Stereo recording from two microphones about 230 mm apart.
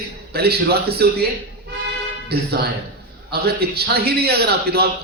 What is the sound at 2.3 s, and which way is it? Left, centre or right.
A man's voice, right.